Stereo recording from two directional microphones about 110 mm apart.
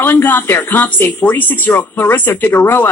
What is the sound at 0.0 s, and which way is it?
Speech, 20° left (ahead or behind).